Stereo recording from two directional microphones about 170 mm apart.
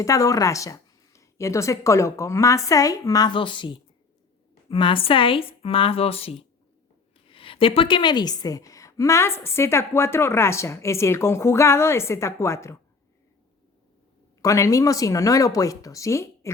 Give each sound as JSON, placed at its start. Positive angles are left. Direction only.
{"t": 0.0, "sound": "a woman's voice", "side_deg": 20}
{"t": 14.4, "sound": "speech", "side_deg": 20}